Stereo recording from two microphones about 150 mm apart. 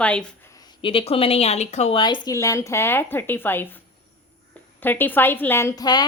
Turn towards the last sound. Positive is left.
turn(degrees=15)  # may be behind; listen again after turning